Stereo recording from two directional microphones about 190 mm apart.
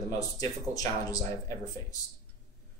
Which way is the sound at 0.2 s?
20° left (ahead or behind).